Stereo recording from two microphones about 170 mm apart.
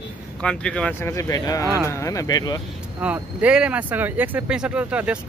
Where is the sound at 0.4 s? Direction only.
5° left (ahead or behind).